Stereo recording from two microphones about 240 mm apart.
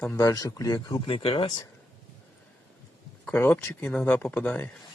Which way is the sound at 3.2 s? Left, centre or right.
Centre.